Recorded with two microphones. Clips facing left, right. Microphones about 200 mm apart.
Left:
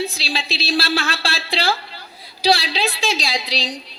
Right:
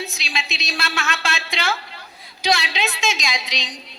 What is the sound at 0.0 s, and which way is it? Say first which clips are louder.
Speech: left 5 dB; 35° left (ahead or behind).